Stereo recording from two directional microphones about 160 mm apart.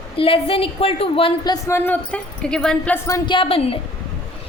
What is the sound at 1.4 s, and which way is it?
Speech, 20° left (ahead or behind).